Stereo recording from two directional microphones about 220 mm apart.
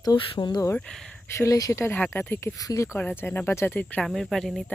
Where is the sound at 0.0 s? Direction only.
20° left (ahead or behind).